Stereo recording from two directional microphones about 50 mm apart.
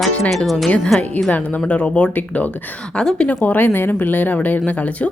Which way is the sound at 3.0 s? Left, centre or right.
Centre.